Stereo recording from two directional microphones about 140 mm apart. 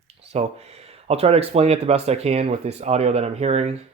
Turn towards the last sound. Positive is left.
turn(degrees=-50)  # may be behind; listen again after turning